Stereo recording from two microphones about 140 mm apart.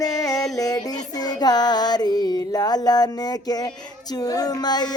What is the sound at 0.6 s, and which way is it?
Female singing, 25° left (ahead or behind).